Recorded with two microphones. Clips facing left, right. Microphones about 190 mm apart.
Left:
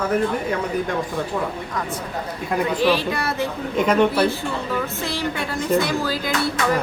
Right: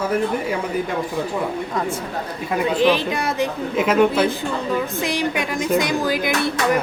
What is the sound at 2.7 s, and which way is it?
Speech, 20° right (ahead or behind).